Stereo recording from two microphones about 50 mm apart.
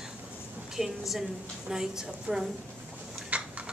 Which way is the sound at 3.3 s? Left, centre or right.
Right.